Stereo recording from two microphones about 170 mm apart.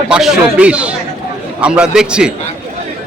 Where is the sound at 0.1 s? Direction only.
5° right (ahead or behind).